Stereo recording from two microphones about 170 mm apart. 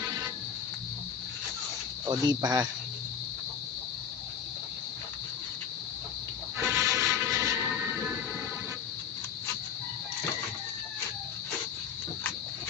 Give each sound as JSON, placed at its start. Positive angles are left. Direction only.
{"t": 2.0, "sound": "speech", "side_deg": -25}
{"t": 6.6, "sound": "music", "side_deg": -15}